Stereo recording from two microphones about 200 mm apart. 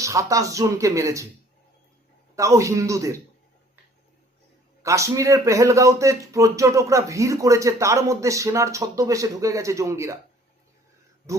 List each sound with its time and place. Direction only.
0.0 s a man's voice: 15° right (ahead or behind)
2.3 s a man's voice: 15° right (ahead or behind)
4.8 s a man's voice: 15° right (ahead or behind)
11.3 s a man's voice: 15° right (ahead or behind)